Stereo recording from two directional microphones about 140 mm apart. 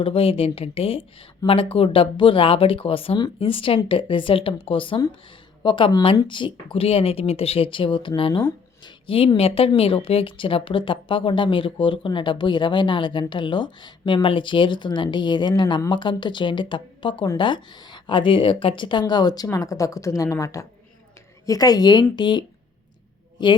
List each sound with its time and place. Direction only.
0.0 s a woman's voice: 40° left (ahead or behind)